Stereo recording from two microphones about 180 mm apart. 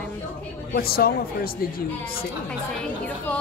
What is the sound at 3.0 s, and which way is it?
Speech, 5° left (ahead or behind).